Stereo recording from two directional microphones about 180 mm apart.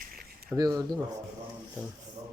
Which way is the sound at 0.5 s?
20° right (ahead or behind).